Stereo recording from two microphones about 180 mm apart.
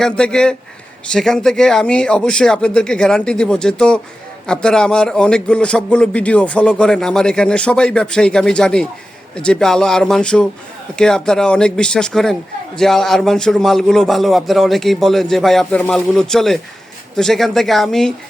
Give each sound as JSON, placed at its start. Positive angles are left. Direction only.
{"t": 0.0, "sound": "a man's voice", "side_deg": 5}